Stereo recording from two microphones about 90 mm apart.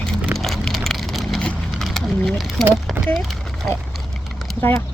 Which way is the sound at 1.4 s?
5° left (ahead or behind).